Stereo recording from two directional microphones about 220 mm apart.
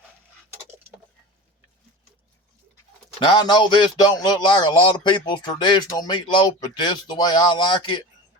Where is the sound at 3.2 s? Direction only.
20° left (ahead or behind).